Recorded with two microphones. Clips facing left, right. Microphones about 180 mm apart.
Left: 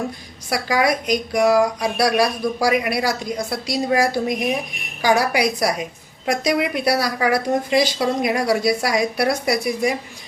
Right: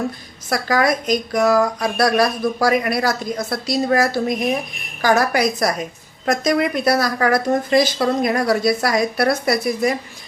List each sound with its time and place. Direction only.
0.5 s a woman's voice: 10° left (ahead or behind)